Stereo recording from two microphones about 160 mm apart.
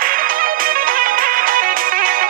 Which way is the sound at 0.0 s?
60° right (ahead or behind).